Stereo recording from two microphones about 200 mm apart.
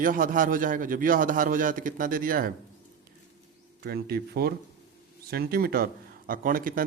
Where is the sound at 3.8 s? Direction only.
50° right (ahead or behind).